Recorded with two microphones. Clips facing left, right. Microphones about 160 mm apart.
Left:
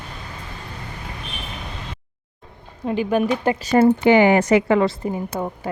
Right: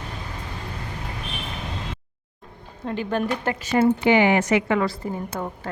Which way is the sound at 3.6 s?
40° left (ahead or behind).